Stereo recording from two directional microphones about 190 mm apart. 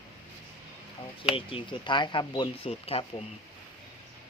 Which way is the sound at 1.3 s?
30° left (ahead or behind).